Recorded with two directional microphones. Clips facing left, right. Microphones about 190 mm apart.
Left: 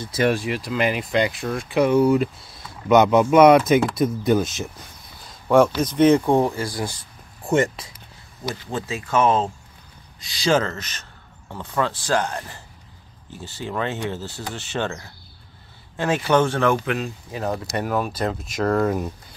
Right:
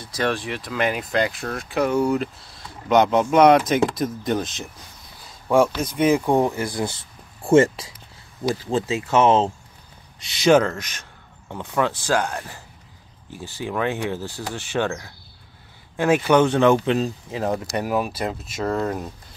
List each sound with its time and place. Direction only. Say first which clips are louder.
0.1 s speech: left 3 dB; 5° left (ahead or behind)
5.8 s speech: left 3 dB; 5° right (ahead or behind)
6.4 s speech: right 1 dB; 20° right (ahead or behind)
16.0 s speech: right 2 dB; 15° right (ahead or behind)
17.7 s speech: even; 10° right (ahead or behind)